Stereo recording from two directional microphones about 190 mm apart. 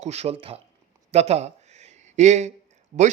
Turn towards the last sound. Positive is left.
turn(degrees=-45)  # may be behind; listen again after turning